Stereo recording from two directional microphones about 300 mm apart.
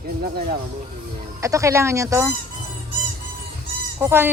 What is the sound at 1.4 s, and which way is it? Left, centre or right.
Speech, centre.